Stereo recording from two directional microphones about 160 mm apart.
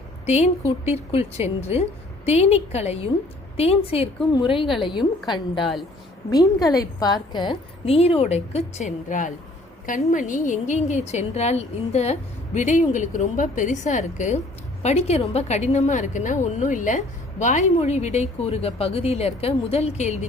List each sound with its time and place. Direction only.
0.3 s a woman's voice: 45° left (ahead or behind); by 5.7 s 30° left (ahead or behind)
6.7 s a woman's voice: 25° left (ahead or behind); by 20.1 s 45° left (ahead or behind)